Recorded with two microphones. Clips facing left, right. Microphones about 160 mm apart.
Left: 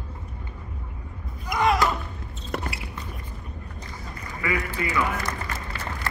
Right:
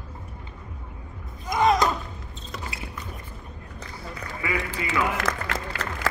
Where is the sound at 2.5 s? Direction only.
60° left (ahead or behind).